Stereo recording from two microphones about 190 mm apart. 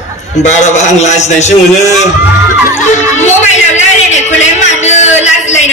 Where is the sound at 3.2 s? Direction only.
35° left (ahead or behind).